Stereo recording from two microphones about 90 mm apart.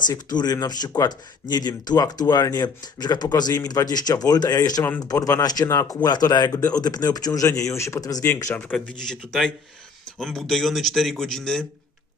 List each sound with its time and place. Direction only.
0.1 s speech: 50° left (ahead or behind)
5.6 s speech: 30° left (ahead or behind)
6.0 s speech: 45° left (ahead or behind); by 8.6 s 30° left (ahead or behind)
8.9 s speech: 5° left (ahead or behind)